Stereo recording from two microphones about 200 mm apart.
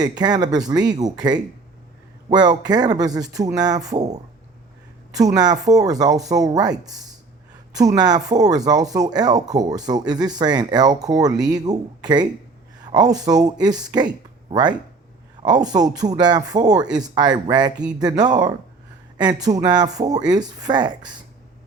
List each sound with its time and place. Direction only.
0.0 s speech: 20° right (ahead or behind)
2.3 s speech: 20° right (ahead or behind)